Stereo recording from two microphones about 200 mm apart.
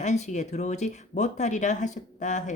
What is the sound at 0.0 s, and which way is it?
Speech, 35° left (ahead or behind).